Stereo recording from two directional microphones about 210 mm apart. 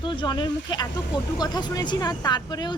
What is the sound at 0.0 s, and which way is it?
Speech, 25° left (ahead or behind).